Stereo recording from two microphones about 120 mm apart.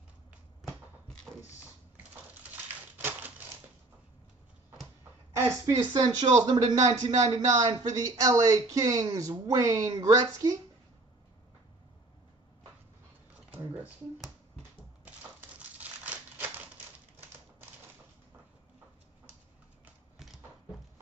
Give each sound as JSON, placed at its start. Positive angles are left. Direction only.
{"t": 2.5, "sound": "typewriter", "side_deg": -15}
{"t": 5.8, "sound": "speech", "side_deg": -35}
{"t": 13.5, "sound": "a sound", "side_deg": -15}
{"t": 15.8, "sound": "crumpling", "side_deg": -15}